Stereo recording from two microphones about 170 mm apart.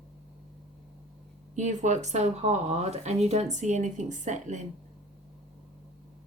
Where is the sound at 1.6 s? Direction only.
45° right (ahead or behind).